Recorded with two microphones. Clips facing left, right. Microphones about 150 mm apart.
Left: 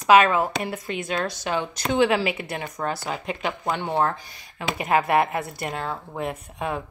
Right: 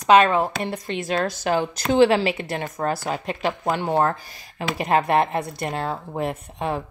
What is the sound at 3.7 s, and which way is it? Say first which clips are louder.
Speech: right 2 dB; 40° right (ahead or behind).